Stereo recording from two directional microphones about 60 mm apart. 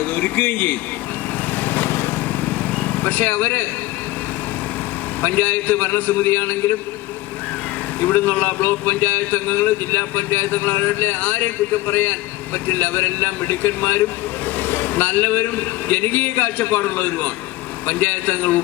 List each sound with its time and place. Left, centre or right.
0.0 s speech: left
1.6 s lawn mower: left
2.7 s speech: left
5.2 s speech: left
8.0 s speech: left